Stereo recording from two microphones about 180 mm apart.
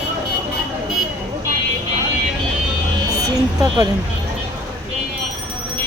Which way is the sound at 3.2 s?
20° right (ahead or behind).